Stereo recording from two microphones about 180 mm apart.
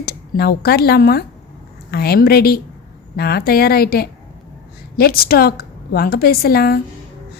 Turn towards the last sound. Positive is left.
turn(degrees=60)  # may be behind; listen again after turning